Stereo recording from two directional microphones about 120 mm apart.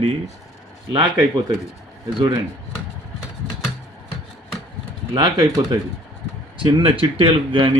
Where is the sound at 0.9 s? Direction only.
35° right (ahead or behind).